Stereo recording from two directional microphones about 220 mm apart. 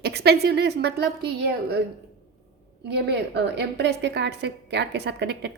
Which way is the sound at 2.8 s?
50° right (ahead or behind).